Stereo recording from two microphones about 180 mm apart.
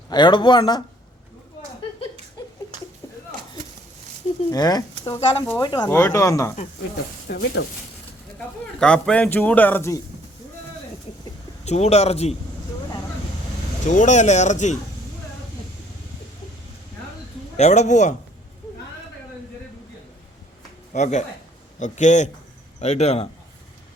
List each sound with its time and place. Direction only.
0.1 s speech: 25° left (ahead or behind)
4.5 s speech: 20° left (ahead or behind)
7.3 s speech: 65° left (ahead or behind)
8.8 s speech: 5° left (ahead or behind)
11.6 s speech: 35° left (ahead or behind)
13.8 s speech: 45° left (ahead or behind)
17.6 s speech: 40° left (ahead or behind)
20.9 s speech: 40° left (ahead or behind)